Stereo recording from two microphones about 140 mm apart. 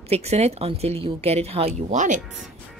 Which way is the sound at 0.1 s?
50° right (ahead or behind).